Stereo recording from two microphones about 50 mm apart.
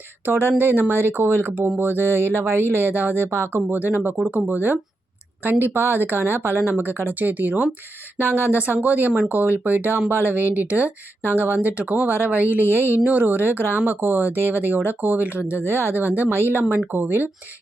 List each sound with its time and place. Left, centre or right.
0.3 s speech: right
1.5 s speech: right
3.8 s speech: right
15.5 s speech: right